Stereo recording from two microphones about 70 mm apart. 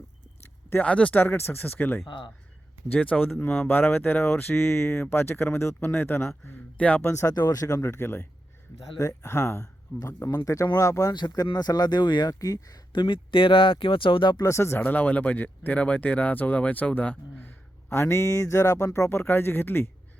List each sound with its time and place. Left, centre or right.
0.8 s speech: centre
1.2 s speech: left
2.9 s speech: centre
6.4 s speech: left
7.0 s speech: left
7.3 s speech: left
11.1 s speech: left
14.4 s speech: left
14.8 s speech: left